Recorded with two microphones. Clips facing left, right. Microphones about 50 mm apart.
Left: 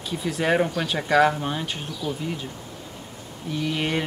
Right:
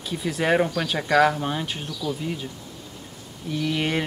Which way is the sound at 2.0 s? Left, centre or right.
Left.